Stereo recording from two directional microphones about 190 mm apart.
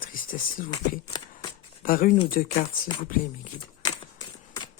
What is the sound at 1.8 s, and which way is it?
Speech, 45° left (ahead or behind).